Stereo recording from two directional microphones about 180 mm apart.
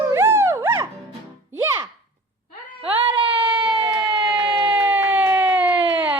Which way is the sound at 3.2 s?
30° right (ahead or behind).